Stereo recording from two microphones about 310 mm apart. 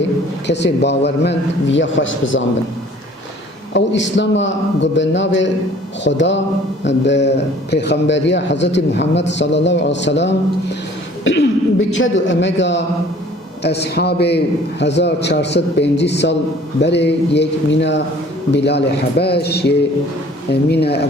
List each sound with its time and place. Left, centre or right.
0.4 s a man's voice: left
3.7 s a man's voice: left